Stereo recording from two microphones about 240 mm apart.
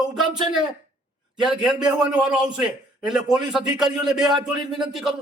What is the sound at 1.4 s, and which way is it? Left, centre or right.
A man's voice, centre.